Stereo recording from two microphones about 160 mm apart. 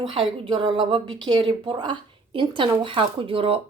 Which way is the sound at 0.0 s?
35° right (ahead or behind).